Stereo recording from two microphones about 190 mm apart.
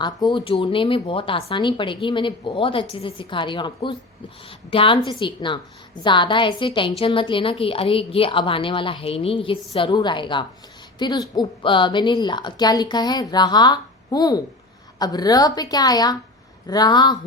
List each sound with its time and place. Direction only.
0.0 s speech: 25° left (ahead or behind)